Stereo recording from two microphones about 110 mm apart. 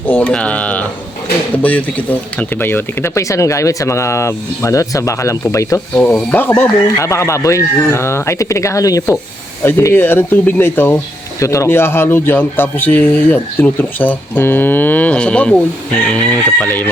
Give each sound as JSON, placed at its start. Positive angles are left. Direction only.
{"t": 0.1, "sound": "speech", "side_deg": 15}
{"t": 6.0, "sound": "speech", "side_deg": 10}
{"t": 7.0, "sound": "speech", "side_deg": 25}
{"t": 9.6, "sound": "speech", "side_deg": 20}